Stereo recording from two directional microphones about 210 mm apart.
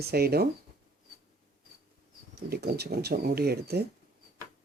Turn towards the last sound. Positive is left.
turn(degrees=-50)  # may be behind; listen again after turning